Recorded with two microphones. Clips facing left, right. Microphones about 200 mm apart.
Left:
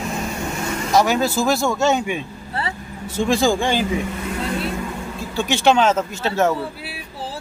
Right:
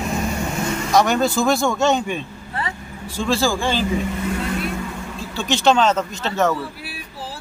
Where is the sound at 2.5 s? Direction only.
30° left (ahead or behind); by 3.9 s 15° left (ahead or behind).